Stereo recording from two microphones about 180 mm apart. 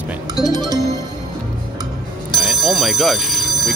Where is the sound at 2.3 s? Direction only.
Centre (ahead or behind).